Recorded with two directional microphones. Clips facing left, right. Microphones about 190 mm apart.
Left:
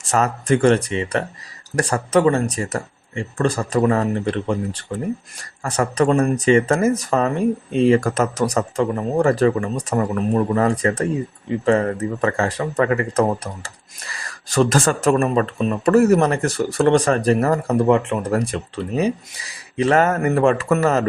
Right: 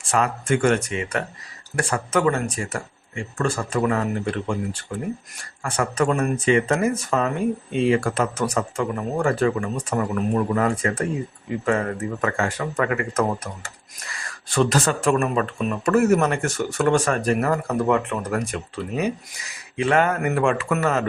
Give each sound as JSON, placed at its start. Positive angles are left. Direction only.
{"t": 0.1, "sound": "speech", "side_deg": 40}
{"t": 14.5, "sound": "speech", "side_deg": 45}